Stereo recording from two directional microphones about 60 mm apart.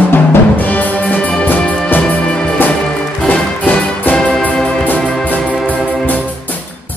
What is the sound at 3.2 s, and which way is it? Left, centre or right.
Music, left.